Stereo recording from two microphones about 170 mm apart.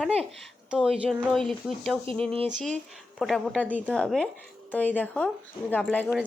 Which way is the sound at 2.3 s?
35° right (ahead or behind).